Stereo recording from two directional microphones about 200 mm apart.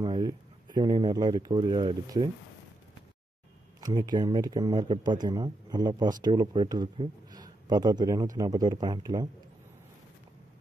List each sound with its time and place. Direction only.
0.0 s speech: 20° right (ahead or behind)
3.8 s speech: 20° right (ahead or behind)